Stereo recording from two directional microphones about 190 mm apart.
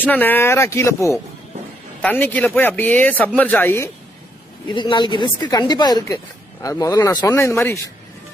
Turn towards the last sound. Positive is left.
turn(degrees=15)  # may be behind; listen again after turning